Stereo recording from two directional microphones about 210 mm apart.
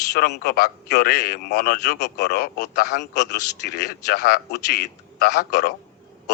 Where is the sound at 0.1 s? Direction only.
50° left (ahead or behind).